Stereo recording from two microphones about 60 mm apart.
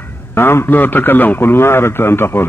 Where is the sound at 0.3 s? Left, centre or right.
Left.